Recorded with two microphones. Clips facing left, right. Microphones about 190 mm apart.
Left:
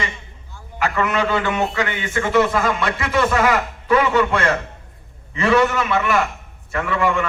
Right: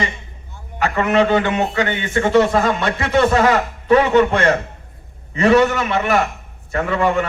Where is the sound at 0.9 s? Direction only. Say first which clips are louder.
Right 6 dB; 35° right (ahead or behind).